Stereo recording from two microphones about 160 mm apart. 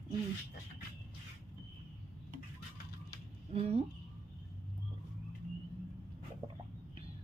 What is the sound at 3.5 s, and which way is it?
Speech, 40° right (ahead or behind).